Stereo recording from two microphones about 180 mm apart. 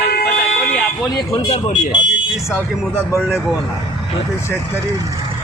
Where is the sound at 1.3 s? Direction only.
25° left (ahead or behind).